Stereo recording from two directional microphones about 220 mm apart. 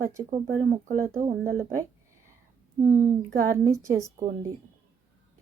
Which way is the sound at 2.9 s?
35° right (ahead or behind).